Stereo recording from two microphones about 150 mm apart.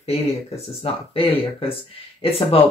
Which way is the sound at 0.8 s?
40° left (ahead or behind).